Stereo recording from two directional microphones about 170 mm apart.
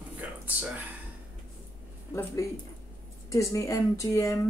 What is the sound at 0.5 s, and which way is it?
Speech, 10° right (ahead or behind).